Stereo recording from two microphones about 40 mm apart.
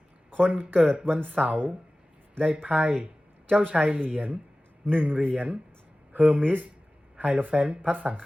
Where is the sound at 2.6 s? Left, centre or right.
Right.